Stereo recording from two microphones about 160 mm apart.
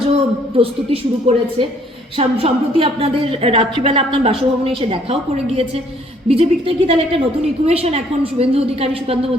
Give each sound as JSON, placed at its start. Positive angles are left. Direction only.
{"t": 0.5, "sound": "a woman's voice", "side_deg": -35}
{"t": 6.2, "sound": "a woman's voice", "side_deg": -40}